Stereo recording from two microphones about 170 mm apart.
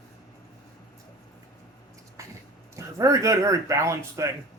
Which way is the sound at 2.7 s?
20° right (ahead or behind).